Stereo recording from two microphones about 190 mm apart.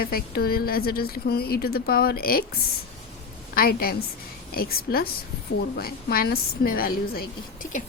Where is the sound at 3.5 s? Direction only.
55° left (ahead or behind).